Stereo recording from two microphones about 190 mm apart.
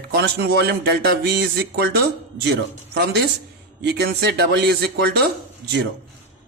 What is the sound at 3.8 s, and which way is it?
A man's voice, 60° right (ahead or behind).